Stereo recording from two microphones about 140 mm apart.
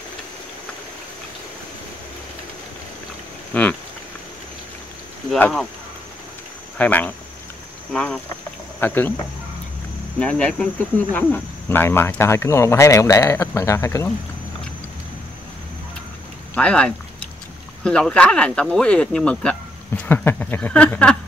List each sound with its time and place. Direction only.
3.5 s speech: 10° left (ahead or behind)
6.8 s speech: 10° left (ahead or behind)
10.1 s speech: 5° left (ahead or behind)
16.5 s a sound: 10° left (ahead or behind)
17.8 s speech: 5° left (ahead or behind)